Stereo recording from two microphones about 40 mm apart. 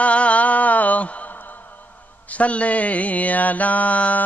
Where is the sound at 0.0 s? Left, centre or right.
Left.